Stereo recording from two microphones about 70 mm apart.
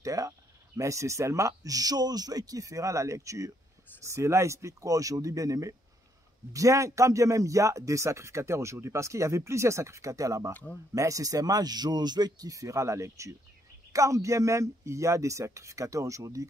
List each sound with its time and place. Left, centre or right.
0.0 s speech: right
10.5 s speech: left
11.0 s speech: right